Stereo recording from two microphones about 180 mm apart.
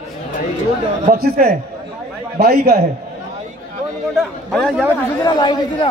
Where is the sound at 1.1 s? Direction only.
60° right (ahead or behind).